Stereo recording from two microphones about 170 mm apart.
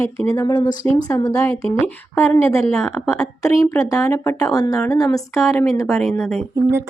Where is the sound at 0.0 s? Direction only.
10° left (ahead or behind).